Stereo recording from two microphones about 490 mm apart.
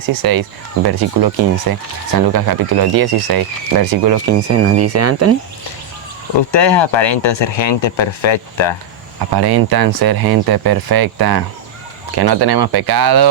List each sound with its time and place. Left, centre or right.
0.2 s speech: right
6.5 s speech: left
9.1 s speech: right